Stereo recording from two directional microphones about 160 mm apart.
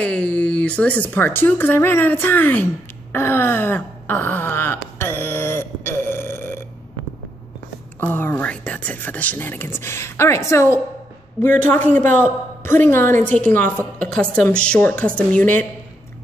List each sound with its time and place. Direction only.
0.0 s speech: 5° left (ahead or behind)
8.0 s speech: 15° left (ahead or behind)
11.4 s a woman's voice: 10° left (ahead or behind)